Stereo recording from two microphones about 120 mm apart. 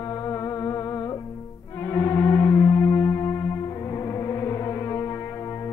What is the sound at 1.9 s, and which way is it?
Music, 20° left (ahead or behind).